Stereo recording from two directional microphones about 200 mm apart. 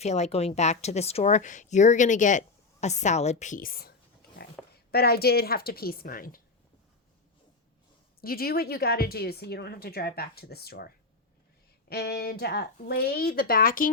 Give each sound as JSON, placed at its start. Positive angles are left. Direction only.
{"t": 0.0, "sound": "a woman's voice", "side_deg": 35}
{"t": 8.2, "sound": "a woman's voice", "side_deg": 50}